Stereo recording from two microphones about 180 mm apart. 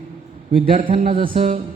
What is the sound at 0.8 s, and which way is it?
Music, 40° right (ahead or behind).